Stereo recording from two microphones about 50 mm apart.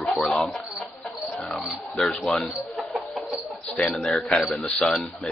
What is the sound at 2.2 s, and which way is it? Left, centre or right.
Bird, centre.